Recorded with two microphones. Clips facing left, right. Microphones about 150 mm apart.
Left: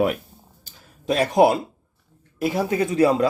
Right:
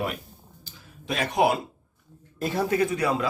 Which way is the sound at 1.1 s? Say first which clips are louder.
Left 7 dB; 35° left (ahead or behind).